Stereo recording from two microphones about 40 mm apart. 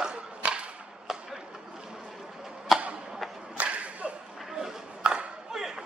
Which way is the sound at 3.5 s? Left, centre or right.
Right.